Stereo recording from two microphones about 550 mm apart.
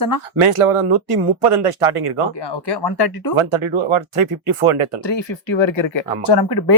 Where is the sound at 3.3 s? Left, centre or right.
Right.